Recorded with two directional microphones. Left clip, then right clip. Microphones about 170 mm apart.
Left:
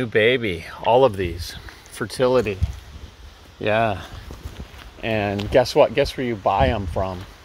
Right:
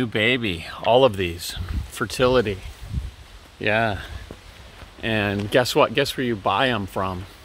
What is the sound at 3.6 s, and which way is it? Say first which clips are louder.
Speech: left 1 dB; centre (ahead or behind).